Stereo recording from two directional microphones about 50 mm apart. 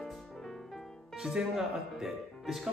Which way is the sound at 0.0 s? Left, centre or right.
Centre.